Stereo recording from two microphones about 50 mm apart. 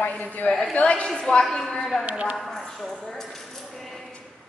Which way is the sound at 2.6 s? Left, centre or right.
Centre.